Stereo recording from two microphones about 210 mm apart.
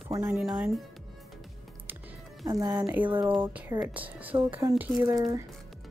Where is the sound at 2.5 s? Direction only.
15° right (ahead or behind).